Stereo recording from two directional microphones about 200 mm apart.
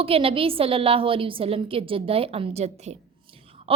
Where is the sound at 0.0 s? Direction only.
30° right (ahead or behind).